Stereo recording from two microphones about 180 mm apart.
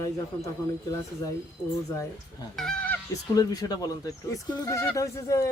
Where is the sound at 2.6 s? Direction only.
5° left (ahead or behind).